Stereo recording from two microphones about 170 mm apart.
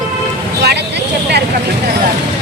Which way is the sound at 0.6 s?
75° right (ahead or behind).